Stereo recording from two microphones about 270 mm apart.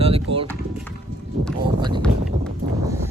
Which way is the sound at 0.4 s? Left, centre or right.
Centre.